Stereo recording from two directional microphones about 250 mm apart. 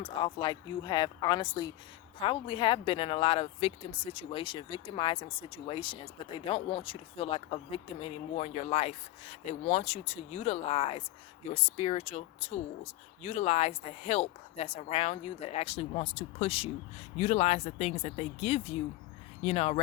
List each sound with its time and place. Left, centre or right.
0.0 s speech: centre